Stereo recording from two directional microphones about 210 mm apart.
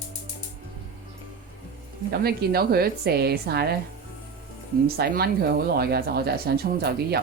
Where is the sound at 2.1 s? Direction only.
50° right (ahead or behind).